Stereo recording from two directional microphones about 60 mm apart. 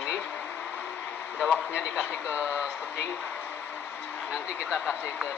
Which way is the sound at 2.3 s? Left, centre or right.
Right.